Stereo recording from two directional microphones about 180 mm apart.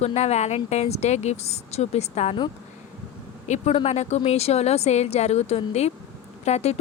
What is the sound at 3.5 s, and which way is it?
Speech, 35° left (ahead or behind).